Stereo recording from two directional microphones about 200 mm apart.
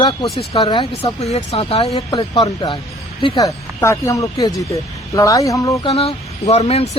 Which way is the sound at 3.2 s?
20° left (ahead or behind).